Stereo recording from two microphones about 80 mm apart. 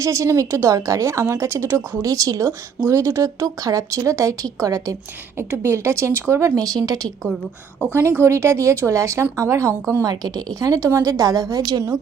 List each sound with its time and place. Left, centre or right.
0.0 s a woman's voice: right
5.4 s a woman's voice: right
7.9 s a woman's voice: right
10.0 s a woman's voice: right